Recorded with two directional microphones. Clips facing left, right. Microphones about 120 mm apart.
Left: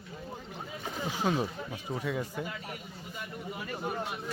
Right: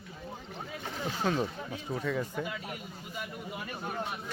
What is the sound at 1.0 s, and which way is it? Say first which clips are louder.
Speech: even; 10° left (ahead or behind).